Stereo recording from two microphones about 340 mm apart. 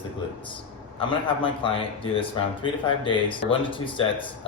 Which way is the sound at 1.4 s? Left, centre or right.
Centre.